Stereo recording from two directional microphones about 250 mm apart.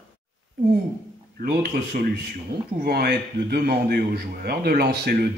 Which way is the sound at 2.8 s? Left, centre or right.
Right.